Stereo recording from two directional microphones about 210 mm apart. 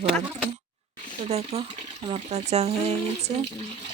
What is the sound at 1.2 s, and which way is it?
Speech, 30° right (ahead or behind).